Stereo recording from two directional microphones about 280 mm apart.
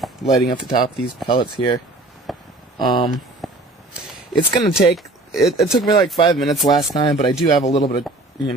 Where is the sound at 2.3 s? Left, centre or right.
Centre.